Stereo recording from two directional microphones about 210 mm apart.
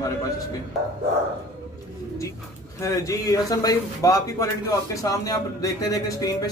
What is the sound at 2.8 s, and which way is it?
Speech, 15° left (ahead or behind).